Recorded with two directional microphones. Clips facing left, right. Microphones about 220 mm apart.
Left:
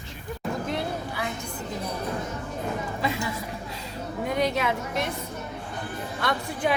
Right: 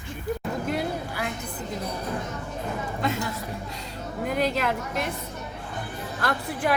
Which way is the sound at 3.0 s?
Centre (ahead or behind).